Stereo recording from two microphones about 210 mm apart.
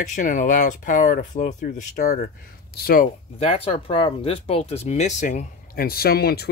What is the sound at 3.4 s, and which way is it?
Speech, 25° left (ahead or behind).